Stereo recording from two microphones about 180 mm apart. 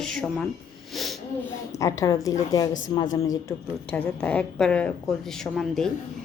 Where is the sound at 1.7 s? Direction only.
15° left (ahead or behind).